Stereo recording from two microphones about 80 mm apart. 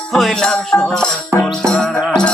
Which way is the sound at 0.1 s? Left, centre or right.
Centre.